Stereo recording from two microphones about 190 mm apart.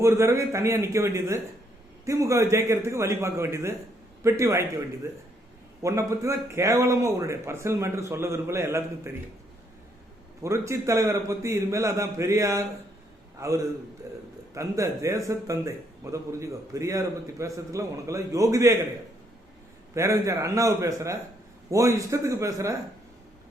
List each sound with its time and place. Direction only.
0.0 s a man's voice: 15° right (ahead or behind)
5.8 s speech: 15° right (ahead or behind)
10.4 s speech: 15° right (ahead or behind)
14.1 s a sound: 15° right (ahead or behind)
14.5 s speech: 15° right (ahead or behind)
19.9 s speech: 15° right (ahead or behind)